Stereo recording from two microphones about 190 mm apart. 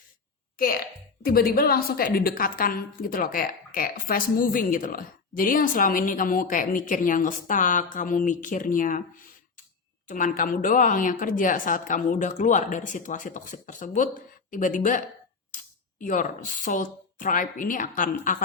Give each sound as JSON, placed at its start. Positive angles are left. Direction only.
{"t": 1.2, "sound": "a woman's voice", "side_deg": 50}
{"t": 10.1, "sound": "a woman's voice", "side_deg": 45}